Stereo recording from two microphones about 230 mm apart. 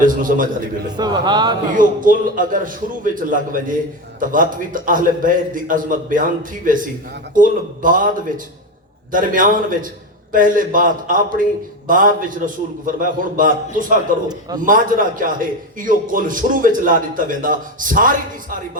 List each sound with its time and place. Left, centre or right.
0.0 s a man's voice: right
0.9 s a man's voice: centre
1.7 s a man's voice: right
9.1 s a man's voice: right